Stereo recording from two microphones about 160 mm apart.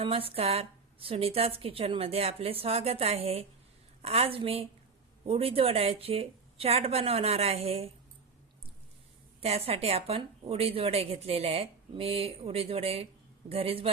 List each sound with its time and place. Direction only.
0.0 s speech: 35° right (ahead or behind)
9.4 s speech: 40° right (ahead or behind)